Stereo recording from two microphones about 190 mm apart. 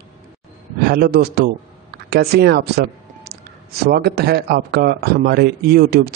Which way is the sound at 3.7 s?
55° right (ahead or behind).